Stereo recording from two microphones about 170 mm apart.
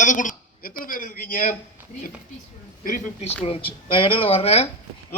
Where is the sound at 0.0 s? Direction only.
50° left (ahead or behind).